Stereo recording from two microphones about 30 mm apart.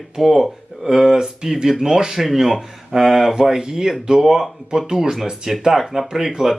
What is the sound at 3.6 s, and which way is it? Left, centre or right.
Speech, right.